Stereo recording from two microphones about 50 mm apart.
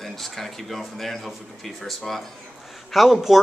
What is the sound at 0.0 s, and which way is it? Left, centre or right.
Speech, centre.